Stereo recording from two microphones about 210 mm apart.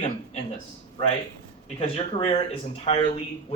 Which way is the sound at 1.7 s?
25° left (ahead or behind).